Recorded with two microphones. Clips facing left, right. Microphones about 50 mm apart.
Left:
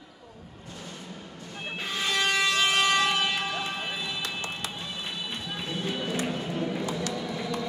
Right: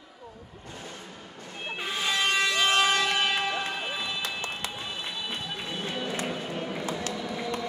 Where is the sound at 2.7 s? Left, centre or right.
Right.